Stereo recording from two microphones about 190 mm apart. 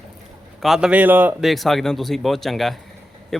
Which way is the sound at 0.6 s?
5° right (ahead or behind).